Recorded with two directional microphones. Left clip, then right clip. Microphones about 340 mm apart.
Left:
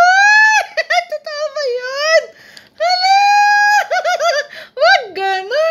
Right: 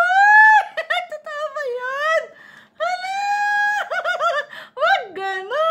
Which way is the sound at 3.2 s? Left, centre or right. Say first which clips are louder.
Left 7 dB; centre.